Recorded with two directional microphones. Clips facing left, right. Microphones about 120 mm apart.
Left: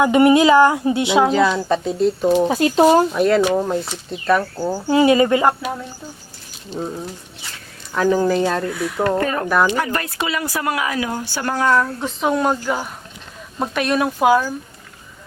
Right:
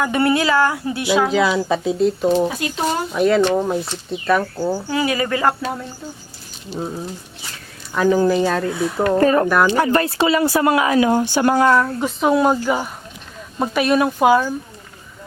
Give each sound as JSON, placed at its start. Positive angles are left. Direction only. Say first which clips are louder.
{"t": 0.0, "sound": "speech", "louder": "left 5 dB", "side_deg": 20}
{"t": 1.3, "sound": "speech", "louder": "left 1 dB", "side_deg": 0}
{"t": 2.5, "sound": "speech", "louder": "left 9 dB", "side_deg": 35}
{"t": 2.8, "sound": "speech", "louder": "left 4 dB", "side_deg": 0}
{"t": 4.5, "sound": "speech", "louder": "right 1 dB", "side_deg": 10}
{"t": 4.9, "sound": "speech", "louder": "left 11 dB", "side_deg": 25}
{"t": 6.7, "sound": "speech", "louder": "even", "side_deg": -5}
{"t": 8.6, "sound": "speech", "louder": "right 1 dB", "side_deg": -25}